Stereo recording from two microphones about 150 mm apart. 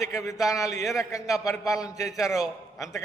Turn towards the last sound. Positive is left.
turn(degrees=20)  # may be behind; listen again after turning